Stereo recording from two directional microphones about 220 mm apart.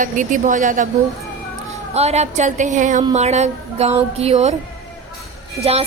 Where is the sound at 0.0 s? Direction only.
35° right (ahead or behind).